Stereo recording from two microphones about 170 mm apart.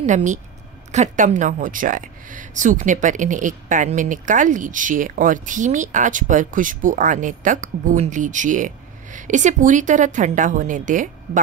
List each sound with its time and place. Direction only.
0.0 s speech: 45° right (ahead or behind)